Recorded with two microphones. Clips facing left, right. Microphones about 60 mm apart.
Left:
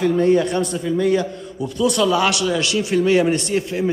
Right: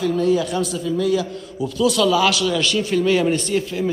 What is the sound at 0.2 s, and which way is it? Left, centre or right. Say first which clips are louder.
Speech: left 3 dB; left.